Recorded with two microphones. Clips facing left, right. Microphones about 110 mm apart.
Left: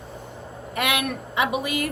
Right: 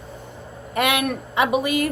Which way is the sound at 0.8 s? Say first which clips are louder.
Right 4 dB; 40° right (ahead or behind).